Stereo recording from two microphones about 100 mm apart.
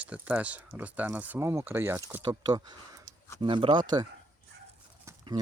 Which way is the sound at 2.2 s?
45° right (ahead or behind).